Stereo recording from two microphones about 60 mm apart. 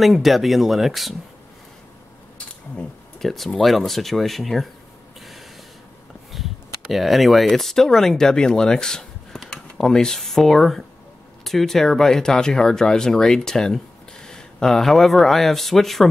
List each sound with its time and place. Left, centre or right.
0.0 s speech: centre
2.3 s camera: centre
3.2 s speech: centre
6.3 s speech: centre